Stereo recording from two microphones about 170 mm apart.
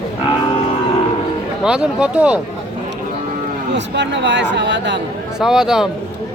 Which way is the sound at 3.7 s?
90° right.